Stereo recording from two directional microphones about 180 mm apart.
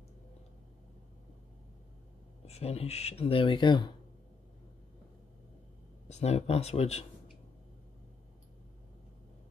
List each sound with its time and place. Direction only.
2.4 s speech: 35° left (ahead or behind)
6.0 s speech: 35° left (ahead or behind)